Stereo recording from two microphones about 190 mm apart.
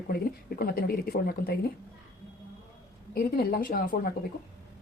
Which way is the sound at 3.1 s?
50° left (ahead or behind).